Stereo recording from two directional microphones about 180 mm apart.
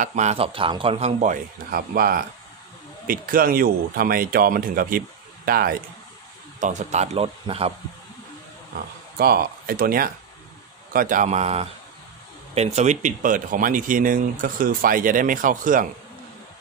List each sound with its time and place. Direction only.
0.0 s a man's voice: 40° right (ahead or behind)
6.6 s a man's voice: 40° right (ahead or behind)
9.2 s a man's voice: 55° right (ahead or behind)